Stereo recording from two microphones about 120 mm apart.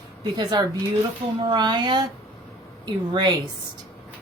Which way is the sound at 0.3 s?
35° right (ahead or behind).